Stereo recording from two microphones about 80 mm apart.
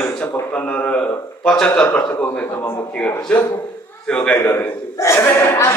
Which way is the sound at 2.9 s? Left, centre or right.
Centre.